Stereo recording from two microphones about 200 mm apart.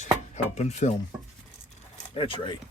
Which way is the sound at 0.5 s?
35° left (ahead or behind).